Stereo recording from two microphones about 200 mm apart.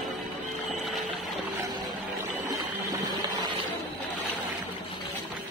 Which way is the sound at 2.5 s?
20° right (ahead or behind).